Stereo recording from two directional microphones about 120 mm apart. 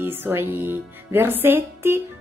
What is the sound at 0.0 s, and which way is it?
Speech, 15° right (ahead or behind).